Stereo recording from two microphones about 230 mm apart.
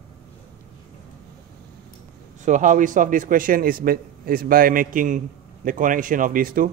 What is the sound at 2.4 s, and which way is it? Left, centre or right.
A man's voice, right.